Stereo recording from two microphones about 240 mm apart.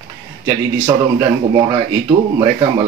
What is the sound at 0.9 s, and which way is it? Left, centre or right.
Speech, centre.